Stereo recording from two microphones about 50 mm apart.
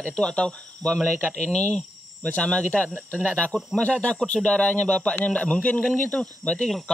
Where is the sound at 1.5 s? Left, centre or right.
Centre.